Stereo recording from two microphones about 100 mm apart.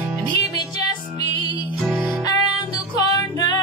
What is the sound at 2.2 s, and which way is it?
Music, 40° left (ahead or behind).